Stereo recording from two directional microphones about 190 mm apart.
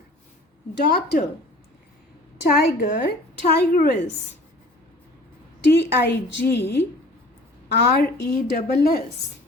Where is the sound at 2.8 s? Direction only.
55° left (ahead or behind).